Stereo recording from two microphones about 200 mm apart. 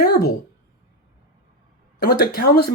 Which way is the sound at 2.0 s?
50° left (ahead or behind).